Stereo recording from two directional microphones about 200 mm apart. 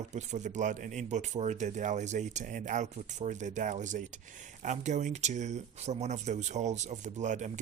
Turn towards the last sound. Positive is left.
turn(degrees=-35)  # may be behind; listen again after turning